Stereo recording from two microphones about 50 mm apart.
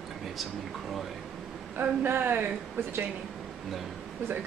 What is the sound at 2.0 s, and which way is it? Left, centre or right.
Speech, right.